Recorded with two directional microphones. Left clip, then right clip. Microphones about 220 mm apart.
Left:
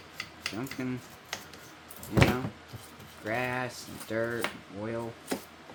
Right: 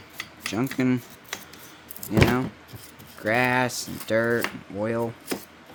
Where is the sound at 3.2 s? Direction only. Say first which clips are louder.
Right 10 dB; 55° right (ahead or behind).